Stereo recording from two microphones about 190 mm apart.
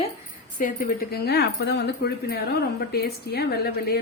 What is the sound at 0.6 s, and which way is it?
Speech, 45° left (ahead or behind).